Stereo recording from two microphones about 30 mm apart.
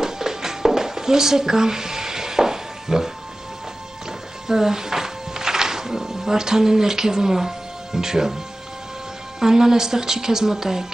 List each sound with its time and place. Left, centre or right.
0.0 s music: centre
4.5 s music: centre
9.4 s speech: centre